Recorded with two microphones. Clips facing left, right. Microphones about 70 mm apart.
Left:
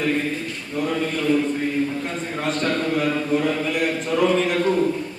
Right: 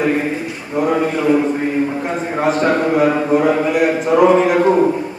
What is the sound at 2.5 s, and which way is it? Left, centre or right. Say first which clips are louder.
A man's voice: right 7 dB; centre.